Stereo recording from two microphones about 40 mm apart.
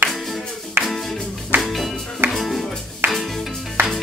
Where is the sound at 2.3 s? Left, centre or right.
Centre.